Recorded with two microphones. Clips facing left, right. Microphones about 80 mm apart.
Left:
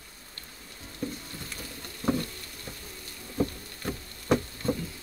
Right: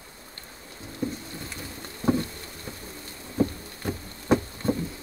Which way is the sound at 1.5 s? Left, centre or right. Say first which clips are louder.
Right 3 dB; right.